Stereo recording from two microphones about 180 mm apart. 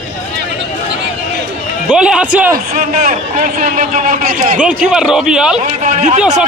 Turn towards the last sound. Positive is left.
turn(degrees=-5)  # may be behind; listen again after turning